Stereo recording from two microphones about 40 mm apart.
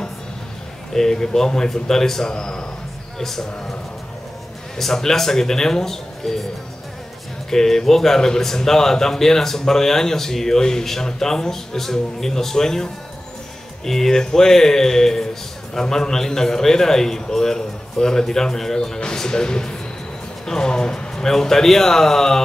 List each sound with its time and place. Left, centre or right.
0.9 s speech: centre
4.7 s speech: centre
7.4 s speech: centre